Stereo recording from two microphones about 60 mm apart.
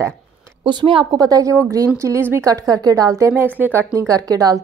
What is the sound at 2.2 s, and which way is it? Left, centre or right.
Speech, right.